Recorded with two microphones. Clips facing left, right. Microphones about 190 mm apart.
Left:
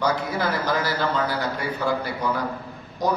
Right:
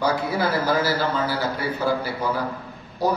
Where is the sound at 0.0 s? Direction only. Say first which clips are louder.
Right 1 dB; 10° right (ahead or behind).